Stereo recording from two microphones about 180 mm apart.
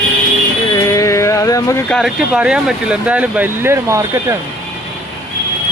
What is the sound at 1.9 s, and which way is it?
Speech, centre (ahead or behind).